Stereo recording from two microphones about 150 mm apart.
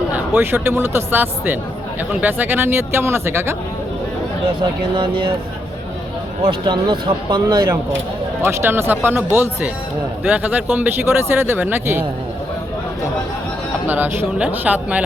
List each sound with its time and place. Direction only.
0.1 s speech: 15° right (ahead or behind)
4.9 s speech: 35° right (ahead or behind)
6.5 s speech: 30° right (ahead or behind)
8.4 s speech: 15° right (ahead or behind)
13.8 s speech: 10° right (ahead or behind)